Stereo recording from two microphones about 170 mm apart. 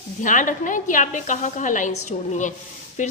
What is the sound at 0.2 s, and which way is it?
A woman's voice, 50° left (ahead or behind).